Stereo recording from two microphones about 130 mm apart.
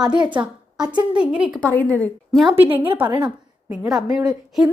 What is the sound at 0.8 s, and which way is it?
Speech, 35° right (ahead or behind).